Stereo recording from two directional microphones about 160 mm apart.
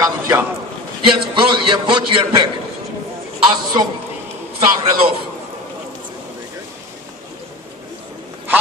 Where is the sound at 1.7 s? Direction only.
30° right (ahead or behind).